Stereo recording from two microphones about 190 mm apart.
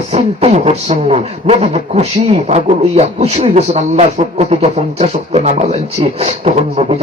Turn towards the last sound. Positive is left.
turn(degrees=-35)  # may be behind; listen again after turning